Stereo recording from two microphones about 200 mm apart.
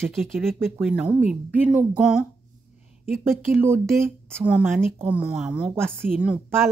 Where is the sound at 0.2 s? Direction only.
Centre (ahead or behind).